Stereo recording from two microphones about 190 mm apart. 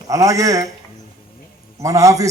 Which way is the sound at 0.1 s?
15° right (ahead or behind).